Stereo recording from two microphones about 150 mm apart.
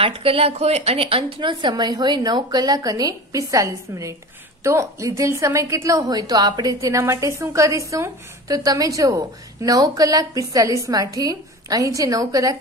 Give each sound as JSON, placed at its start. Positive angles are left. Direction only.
{"t": 0.0, "sound": "a woman's voice", "side_deg": -40}